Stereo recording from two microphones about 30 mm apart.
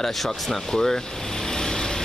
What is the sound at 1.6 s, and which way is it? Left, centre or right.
Vehicle, centre.